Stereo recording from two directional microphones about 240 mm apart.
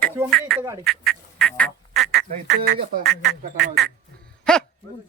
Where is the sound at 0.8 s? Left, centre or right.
Centre.